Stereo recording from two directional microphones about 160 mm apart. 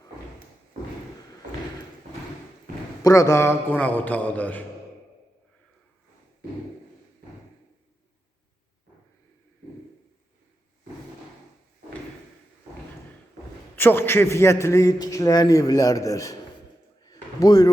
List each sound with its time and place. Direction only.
3.0 s a man's voice: 20° left (ahead or behind)
13.7 s a man's voice: 15° left (ahead or behind)
17.0 s a sound: 25° left (ahead or behind)